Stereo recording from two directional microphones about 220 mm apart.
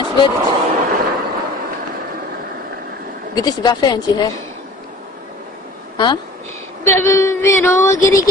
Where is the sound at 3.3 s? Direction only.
15° left (ahead or behind).